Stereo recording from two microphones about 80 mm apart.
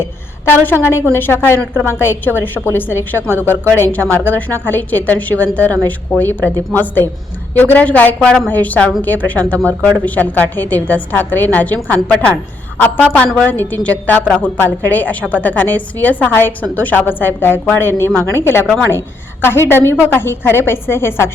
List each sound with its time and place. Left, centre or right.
0.0 s a woman's voice: left